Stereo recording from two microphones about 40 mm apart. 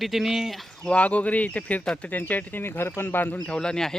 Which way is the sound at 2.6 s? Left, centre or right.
Left.